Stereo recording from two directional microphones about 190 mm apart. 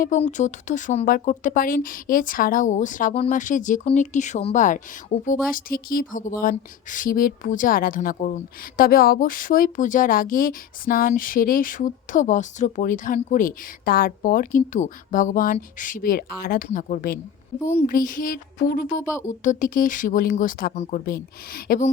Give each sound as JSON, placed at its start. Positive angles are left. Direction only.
{"t": 0.0, "sound": "speech", "side_deg": 40}